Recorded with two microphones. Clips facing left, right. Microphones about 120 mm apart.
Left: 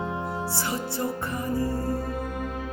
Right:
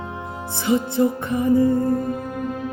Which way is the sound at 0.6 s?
20° right (ahead or behind).